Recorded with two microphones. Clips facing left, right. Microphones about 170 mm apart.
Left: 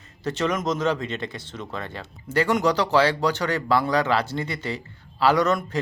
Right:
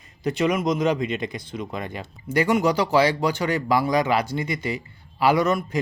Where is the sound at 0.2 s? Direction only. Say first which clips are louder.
Right 3 dB; 15° right (ahead or behind).